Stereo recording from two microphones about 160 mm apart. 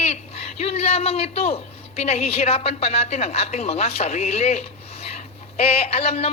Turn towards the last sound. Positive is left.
turn(degrees=40)  # may be behind; listen again after turning